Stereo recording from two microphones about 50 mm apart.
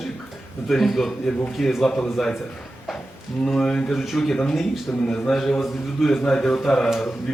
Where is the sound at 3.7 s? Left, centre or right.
Centre.